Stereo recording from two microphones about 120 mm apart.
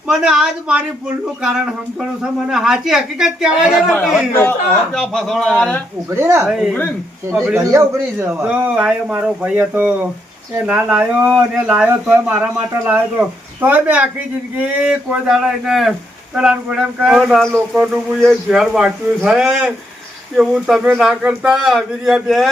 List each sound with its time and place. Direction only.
0.1 s speech: 5° right (ahead or behind)
2.5 s speech: 5° right (ahead or behind)
4.3 s speech: 20° left (ahead or behind)
4.9 s speech: 5° left (ahead or behind)
6.1 s a man's voice: 20° right (ahead or behind)
6.4 s speech: 5° right (ahead or behind)
7.5 s a man's voice: 25° right (ahead or behind)
8.4 s speech: 10° right (ahead or behind)